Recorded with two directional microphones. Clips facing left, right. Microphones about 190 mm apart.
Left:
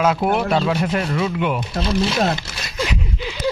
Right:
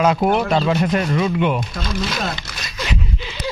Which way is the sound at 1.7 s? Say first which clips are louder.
Left 5 dB; 25° left (ahead or behind).